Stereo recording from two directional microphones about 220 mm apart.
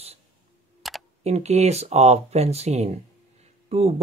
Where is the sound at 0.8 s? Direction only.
Centre (ahead or behind).